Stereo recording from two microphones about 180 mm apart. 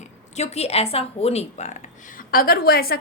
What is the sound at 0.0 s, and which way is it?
A woman's voice, 35° left (ahead or behind).